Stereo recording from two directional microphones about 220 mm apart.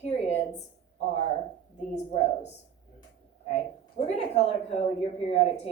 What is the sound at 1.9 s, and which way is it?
A woman's voice, 30° left (ahead or behind).